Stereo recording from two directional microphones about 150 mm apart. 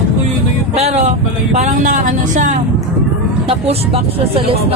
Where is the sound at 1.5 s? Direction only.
55° right (ahead or behind).